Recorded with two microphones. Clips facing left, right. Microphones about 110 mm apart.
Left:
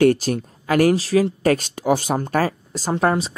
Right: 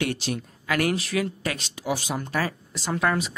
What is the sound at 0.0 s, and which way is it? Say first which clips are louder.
A woman's voice: left 11 dB; 45° left (ahead or behind).